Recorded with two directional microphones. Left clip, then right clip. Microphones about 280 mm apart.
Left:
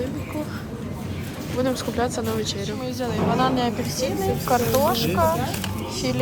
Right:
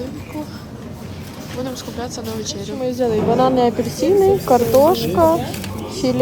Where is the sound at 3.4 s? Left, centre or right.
Left.